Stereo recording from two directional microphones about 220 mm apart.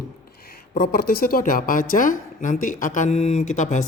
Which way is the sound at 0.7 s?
40° left (ahead or behind).